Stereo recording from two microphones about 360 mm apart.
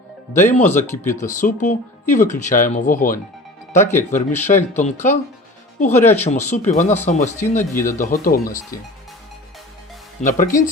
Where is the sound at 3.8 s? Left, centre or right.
Centre.